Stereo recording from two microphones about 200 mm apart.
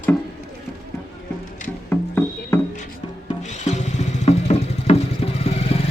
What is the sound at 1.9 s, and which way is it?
Music, 10° left (ahead or behind).